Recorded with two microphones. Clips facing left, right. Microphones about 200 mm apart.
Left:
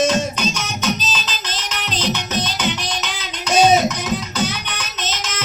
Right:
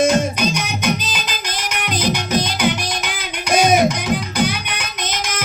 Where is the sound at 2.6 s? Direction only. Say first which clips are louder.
Right 3 dB; 55° right (ahead or behind).